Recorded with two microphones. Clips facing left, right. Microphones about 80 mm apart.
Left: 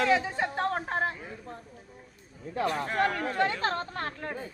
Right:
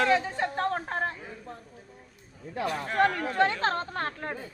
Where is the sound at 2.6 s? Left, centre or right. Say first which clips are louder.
Left 2 dB; left.